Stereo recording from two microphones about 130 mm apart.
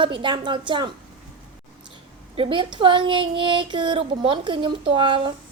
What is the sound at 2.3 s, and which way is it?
A woman's voice, 40° right (ahead or behind).